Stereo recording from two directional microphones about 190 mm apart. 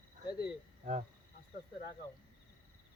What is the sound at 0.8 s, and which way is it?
Insect, 40° right (ahead or behind).